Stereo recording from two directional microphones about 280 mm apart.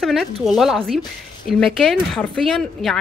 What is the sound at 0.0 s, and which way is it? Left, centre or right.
Speech, centre.